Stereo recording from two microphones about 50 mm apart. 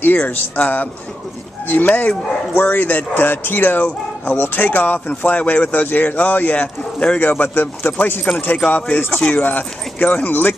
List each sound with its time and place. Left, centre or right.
0.0 s speech: left
8.6 s speech: left